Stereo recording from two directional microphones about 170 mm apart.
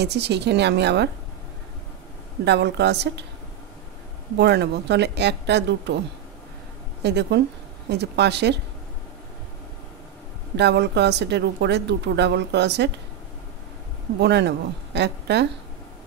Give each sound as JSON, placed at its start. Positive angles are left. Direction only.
{"t": 0.0, "sound": "speech", "side_deg": -80}
{"t": 2.4, "sound": "speech", "side_deg": -85}
{"t": 4.4, "sound": "speech", "side_deg": -85}
{"t": 7.0, "sound": "speech", "side_deg": -85}
{"t": 10.5, "sound": "speech", "side_deg": -85}
{"t": 14.2, "sound": "a woman's voice", "side_deg": -80}